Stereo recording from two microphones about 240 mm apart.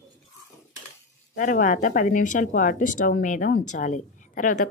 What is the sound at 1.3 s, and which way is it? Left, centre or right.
Speech, left.